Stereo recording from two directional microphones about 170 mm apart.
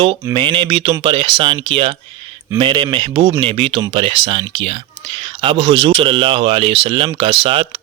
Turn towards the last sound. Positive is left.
turn(degrees=-30)  # may be behind; listen again after turning